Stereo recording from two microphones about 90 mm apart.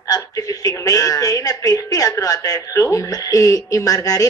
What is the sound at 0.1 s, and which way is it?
A woman's voice, 40° left (ahead or behind).